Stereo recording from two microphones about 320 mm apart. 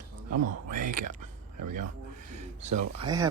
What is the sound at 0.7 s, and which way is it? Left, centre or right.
Speech, right.